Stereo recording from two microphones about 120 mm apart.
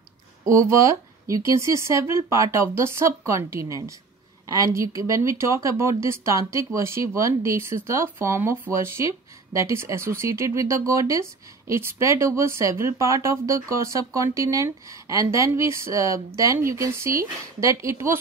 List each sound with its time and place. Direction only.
0.5 s speech: 25° right (ahead or behind)